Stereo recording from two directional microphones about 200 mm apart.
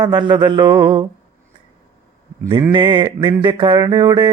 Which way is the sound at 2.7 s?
25° right (ahead or behind).